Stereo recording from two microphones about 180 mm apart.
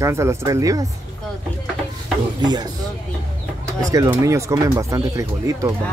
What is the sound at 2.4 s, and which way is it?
Speech, 25° right (ahead or behind).